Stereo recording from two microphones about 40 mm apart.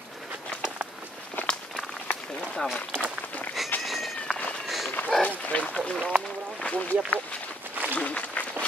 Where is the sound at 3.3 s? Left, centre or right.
Left.